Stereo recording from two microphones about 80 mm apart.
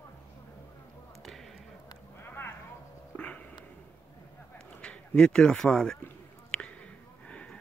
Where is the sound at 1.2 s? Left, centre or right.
Centre.